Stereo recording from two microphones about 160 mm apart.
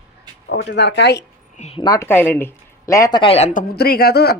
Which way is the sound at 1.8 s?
20° left (ahead or behind).